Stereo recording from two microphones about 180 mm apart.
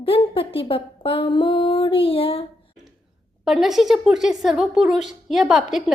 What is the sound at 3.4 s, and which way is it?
A woman's voice, centre (ahead or behind).